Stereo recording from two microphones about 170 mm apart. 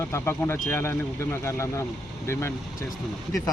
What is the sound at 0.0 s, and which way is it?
A man's voice, 15° left (ahead or behind).